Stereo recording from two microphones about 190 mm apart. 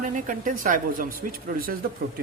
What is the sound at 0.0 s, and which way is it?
Speech, 45° right (ahead or behind).